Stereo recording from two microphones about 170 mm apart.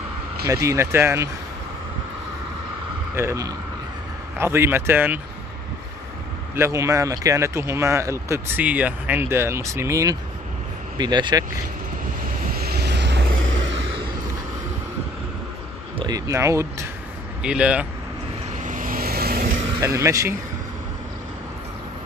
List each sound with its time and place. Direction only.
0.5 s speech: 20° right (ahead or behind)
3.2 s speech: 15° right (ahead or behind)
6.5 s speech: 15° right (ahead or behind)
12.5 s vehicle: 70° right (ahead or behind); by 13.7 s 90° right
16.0 s speech: 20° right (ahead or behind)
17.4 s speech: 5° right (ahead or behind)
18.6 s vehicle: 50° right (ahead or behind)
19.8 s speech: 20° right (ahead or behind)